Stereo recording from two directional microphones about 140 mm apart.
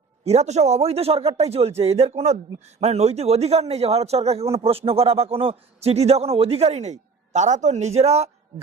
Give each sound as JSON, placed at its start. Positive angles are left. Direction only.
{"t": 0.3, "sound": "a man's voice", "side_deg": -55}